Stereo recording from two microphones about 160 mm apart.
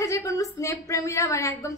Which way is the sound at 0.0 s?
20° left (ahead or behind).